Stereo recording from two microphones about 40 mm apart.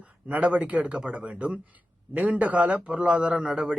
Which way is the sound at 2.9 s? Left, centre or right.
Right.